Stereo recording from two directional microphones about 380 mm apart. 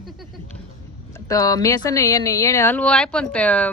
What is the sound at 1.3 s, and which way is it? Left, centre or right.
A woman's voice, centre.